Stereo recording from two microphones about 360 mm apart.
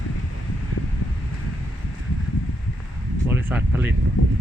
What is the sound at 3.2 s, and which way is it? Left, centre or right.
Speech, centre.